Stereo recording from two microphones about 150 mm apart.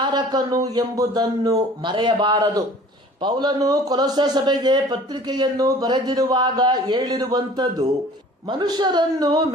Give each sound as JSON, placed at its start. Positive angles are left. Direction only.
{"t": 0.0, "sound": "a man's voice", "side_deg": -30}